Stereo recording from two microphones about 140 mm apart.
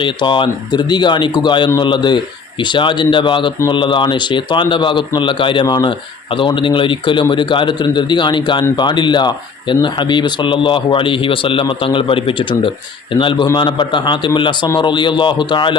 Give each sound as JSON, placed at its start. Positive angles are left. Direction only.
{"t": 0.0, "sound": "speech", "side_deg": 35}